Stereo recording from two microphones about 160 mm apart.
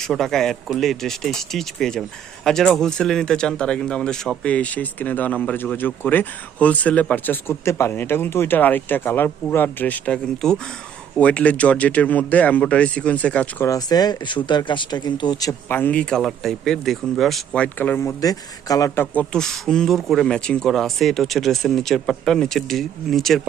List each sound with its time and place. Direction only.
0.0 s speech: centre (ahead or behind)
13.7 s speech: 25° left (ahead or behind)
18.2 s speech: 25° left (ahead or behind)
19.1 s speech: 5° left (ahead or behind)